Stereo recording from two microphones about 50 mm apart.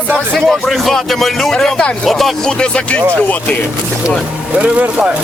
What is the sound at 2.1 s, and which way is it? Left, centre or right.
Speech, centre.